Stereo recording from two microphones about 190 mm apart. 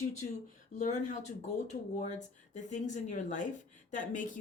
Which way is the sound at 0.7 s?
40° left (ahead or behind).